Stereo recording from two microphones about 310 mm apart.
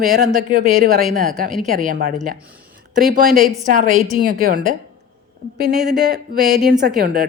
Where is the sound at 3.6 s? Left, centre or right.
Right.